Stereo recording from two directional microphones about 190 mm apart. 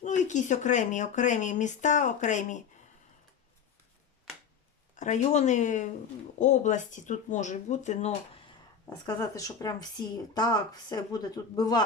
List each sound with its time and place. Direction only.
0.0 s speech: 40° left (ahead or behind)
4.9 s speech: 40° left (ahead or behind)
8.9 s speech: 20° left (ahead or behind)